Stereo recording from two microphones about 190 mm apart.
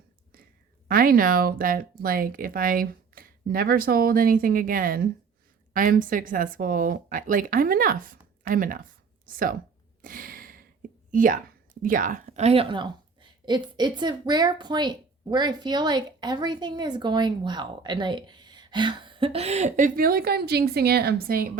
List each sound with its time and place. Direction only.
0.9 s speech: 50° right (ahead or behind)
10.0 s a sound: 45° right (ahead or behind)
11.1 s a woman's voice: 45° right (ahead or behind)